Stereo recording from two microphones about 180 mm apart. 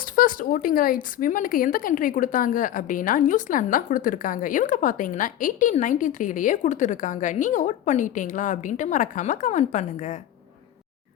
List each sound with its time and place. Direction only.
0.0 s speech: 50° left (ahead or behind)